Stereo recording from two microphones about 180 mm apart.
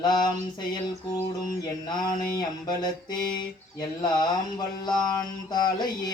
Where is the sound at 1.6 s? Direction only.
25° left (ahead or behind).